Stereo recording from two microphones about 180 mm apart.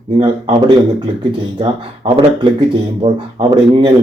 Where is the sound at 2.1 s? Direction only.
30° right (ahead or behind).